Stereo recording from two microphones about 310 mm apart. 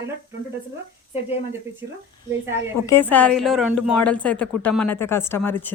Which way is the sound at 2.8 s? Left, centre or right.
Centre.